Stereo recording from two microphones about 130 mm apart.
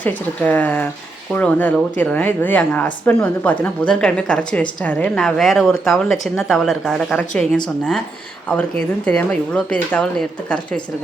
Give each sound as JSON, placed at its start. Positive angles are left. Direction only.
{"t": 0.0, "sound": "a woman's voice", "side_deg": 15}
{"t": 9.0, "sound": "a woman's voice", "side_deg": 10}